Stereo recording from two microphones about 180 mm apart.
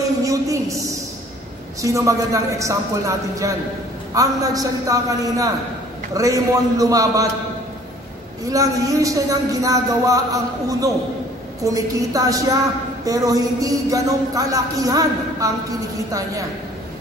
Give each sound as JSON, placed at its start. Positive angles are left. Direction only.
{"t": 0.2, "sound": "a sound", "side_deg": -20}
{"t": 1.8, "sound": "a woman's voice", "side_deg": -20}
{"t": 8.5, "sound": "a man's voice", "side_deg": -20}